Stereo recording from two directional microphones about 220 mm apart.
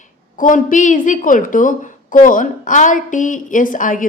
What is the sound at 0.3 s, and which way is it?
A woman's voice, 35° left (ahead or behind).